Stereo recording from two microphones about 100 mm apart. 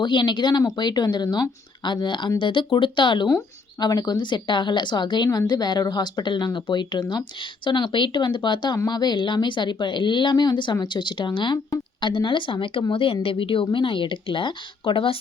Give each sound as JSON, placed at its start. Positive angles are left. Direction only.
{"t": 0.0, "sound": "a woman's voice", "side_deg": 50}